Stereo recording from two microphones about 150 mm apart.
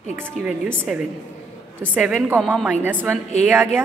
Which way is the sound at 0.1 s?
10° right (ahead or behind).